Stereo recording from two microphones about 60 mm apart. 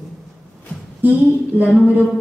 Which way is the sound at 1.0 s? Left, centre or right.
Right.